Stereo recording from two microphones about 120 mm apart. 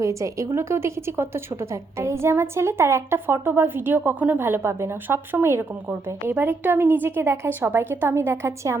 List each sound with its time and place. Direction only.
0.0 s a woman's voice: 25° right (ahead or behind)